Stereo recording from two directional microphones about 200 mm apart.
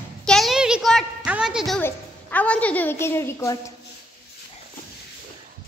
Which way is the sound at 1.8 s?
10° left (ahead or behind).